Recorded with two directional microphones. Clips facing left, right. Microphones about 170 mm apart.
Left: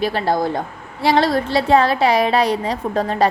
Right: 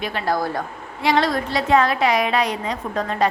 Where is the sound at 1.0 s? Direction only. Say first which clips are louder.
Left 3 dB; 35° left (ahead or behind).